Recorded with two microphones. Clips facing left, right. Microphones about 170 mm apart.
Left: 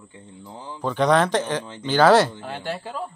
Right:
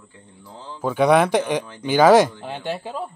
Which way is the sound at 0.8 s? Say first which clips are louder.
Right 3 dB; 10° right (ahead or behind).